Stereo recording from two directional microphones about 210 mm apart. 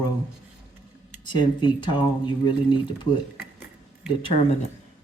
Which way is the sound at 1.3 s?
20° left (ahead or behind).